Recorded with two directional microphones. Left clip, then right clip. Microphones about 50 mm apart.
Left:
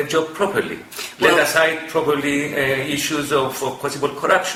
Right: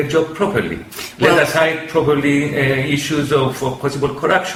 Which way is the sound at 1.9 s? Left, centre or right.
Left.